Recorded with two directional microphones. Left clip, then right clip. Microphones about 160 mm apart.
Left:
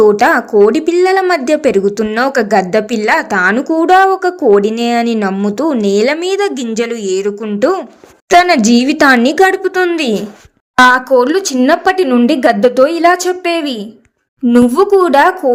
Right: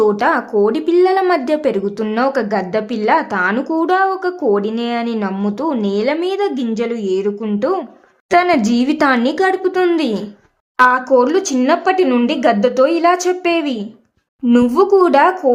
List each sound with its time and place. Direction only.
0.0 s a woman's voice: 15° left (ahead or behind)
10.9 s a woman's voice: 35° left (ahead or behind)